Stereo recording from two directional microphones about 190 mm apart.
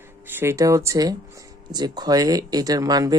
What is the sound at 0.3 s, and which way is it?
Speech, 10° right (ahead or behind).